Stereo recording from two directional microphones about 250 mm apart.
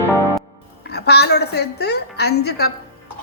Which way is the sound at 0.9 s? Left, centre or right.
Left.